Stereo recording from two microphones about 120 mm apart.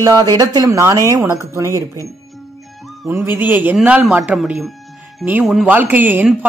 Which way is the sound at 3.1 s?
20° right (ahead or behind).